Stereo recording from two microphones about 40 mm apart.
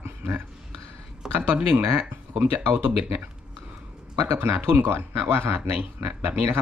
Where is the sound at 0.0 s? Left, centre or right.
Right.